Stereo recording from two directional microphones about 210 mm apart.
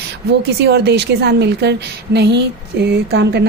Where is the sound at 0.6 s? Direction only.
50° right (ahead or behind).